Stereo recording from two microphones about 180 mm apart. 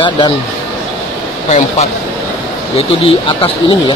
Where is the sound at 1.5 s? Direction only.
40° left (ahead or behind).